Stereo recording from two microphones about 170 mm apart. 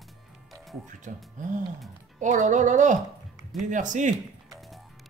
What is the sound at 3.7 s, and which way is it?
Speech, 45° right (ahead or behind).